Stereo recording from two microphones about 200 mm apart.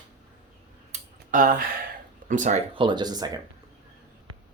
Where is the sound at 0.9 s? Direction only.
40° right (ahead or behind).